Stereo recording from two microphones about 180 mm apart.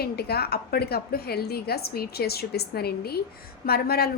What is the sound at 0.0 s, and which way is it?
A woman's voice, 60° left (ahead or behind).